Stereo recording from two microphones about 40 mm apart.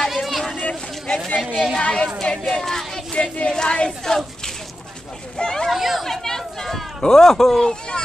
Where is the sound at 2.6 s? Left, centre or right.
Centre.